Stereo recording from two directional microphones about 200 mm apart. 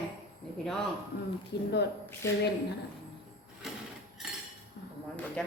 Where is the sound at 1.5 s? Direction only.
55° left (ahead or behind).